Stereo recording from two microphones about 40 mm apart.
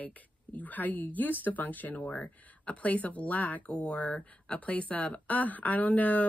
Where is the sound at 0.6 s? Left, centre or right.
Left.